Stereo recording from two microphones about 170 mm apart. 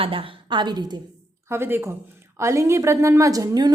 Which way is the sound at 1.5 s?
15° right (ahead or behind).